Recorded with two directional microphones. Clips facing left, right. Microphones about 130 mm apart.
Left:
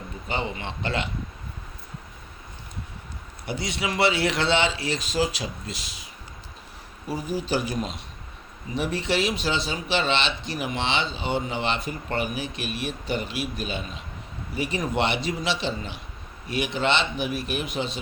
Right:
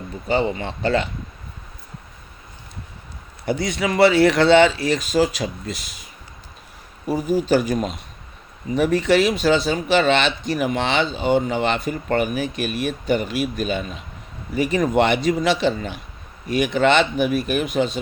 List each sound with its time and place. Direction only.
0.3 s speech: 40° right (ahead or behind)
3.4 s speech: 45° right (ahead or behind)
7.1 s speech: 45° right (ahead or behind)